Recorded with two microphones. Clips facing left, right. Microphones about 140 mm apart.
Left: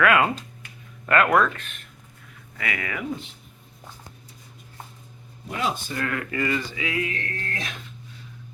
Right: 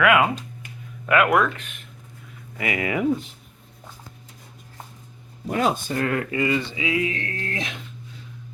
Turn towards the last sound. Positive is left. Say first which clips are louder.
# right 3 dB
turn(degrees=-25)  # may be behind; listen again after turning